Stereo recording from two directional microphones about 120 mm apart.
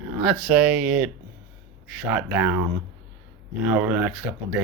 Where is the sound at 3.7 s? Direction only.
10° right (ahead or behind).